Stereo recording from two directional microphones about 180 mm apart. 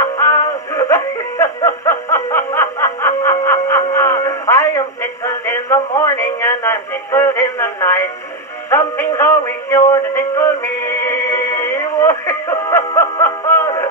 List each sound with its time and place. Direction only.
0.2 s music: 15° left (ahead or behind)